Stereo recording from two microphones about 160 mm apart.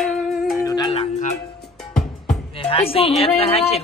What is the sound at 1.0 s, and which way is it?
Music, 45° left (ahead or behind).